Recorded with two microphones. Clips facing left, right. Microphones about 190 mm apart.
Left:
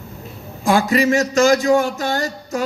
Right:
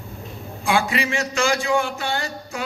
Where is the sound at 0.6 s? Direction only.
40° left (ahead or behind).